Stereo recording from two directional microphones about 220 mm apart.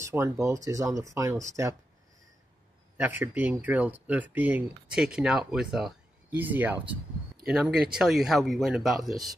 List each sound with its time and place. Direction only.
0.1 s speech: 10° right (ahead or behind)
3.0 s speech: 10° right (ahead or behind)
6.8 s a sound: 25° right (ahead or behind)
7.4 s speech: 5° right (ahead or behind)